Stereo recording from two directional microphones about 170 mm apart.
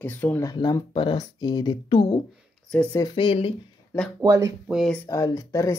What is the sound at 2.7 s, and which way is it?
Speech, 10° left (ahead or behind).